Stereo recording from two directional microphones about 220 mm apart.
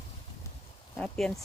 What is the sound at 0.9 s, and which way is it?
Speech, centre (ahead or behind).